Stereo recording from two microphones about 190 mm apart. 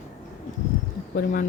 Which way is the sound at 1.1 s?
50° left (ahead or behind).